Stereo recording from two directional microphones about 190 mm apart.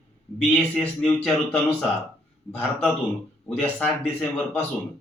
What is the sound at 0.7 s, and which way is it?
Speech, 5° left (ahead or behind).